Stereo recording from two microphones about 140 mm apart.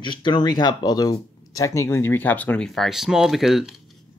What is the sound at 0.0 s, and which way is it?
Speech, 35° left (ahead or behind).